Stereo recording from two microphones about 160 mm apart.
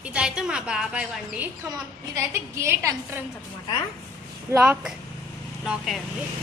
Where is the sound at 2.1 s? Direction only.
20° right (ahead or behind).